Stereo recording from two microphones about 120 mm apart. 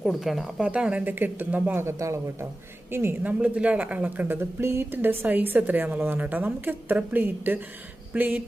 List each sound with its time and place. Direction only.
0.0 s speech: centre (ahead or behind)